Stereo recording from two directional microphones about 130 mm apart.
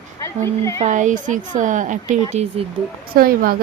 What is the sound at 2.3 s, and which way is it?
Speech, 55° right (ahead or behind).